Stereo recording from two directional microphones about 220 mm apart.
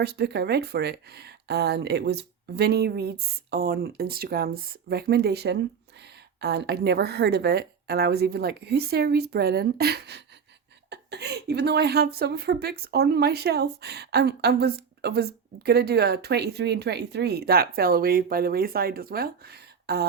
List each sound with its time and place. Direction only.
0.0 s speech: 50° right (ahead or behind)